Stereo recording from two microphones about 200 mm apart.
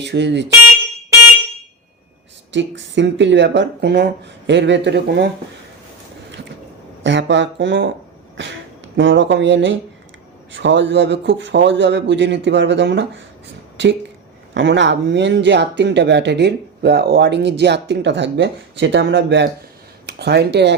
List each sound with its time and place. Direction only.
0.0 s speech: 60° right (ahead or behind)
2.5 s speech: 65° right (ahead or behind)
7.0 s speech: 65° right (ahead or behind)
8.4 s a sound: 65° right (ahead or behind)
9.0 s speech: 65° right (ahead or behind)
14.5 s speech: 60° right (ahead or behind)